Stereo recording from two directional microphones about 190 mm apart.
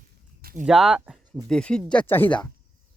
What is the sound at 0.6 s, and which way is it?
Speech, centre (ahead or behind).